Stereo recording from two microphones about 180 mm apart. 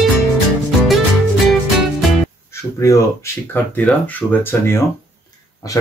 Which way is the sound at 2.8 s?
15° left (ahead or behind).